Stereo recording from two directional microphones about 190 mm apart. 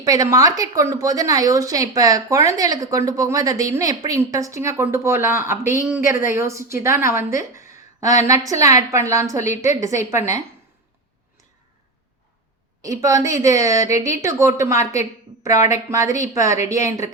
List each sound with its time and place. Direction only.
0.0 s a woman's voice: 20° right (ahead or behind)
12.8 s a woman's voice: 15° right (ahead or behind)